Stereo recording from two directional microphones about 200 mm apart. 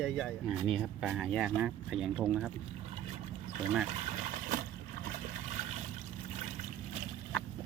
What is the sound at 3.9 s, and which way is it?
Trickle, 35° right (ahead or behind).